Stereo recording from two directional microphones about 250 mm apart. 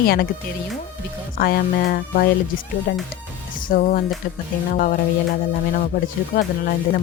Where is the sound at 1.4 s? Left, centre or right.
Left.